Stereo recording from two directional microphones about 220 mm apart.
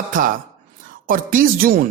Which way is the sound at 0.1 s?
35° right (ahead or behind).